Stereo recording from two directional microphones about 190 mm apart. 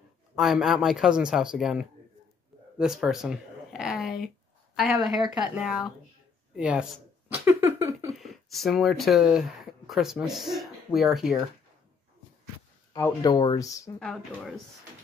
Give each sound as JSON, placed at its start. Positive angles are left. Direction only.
{"t": 0.4, "sound": "speech", "side_deg": 0}
{"t": 6.5, "sound": "a sound", "side_deg": -5}
{"t": 8.2, "sound": "speech", "side_deg": 0}
{"t": 12.9, "sound": "speech", "side_deg": 20}
{"t": 13.9, "sound": "speech", "side_deg": 0}